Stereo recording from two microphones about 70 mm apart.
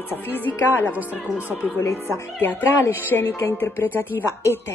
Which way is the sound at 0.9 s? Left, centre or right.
Right.